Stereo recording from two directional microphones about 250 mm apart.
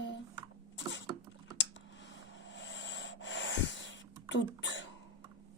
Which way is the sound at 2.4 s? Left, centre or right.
Left.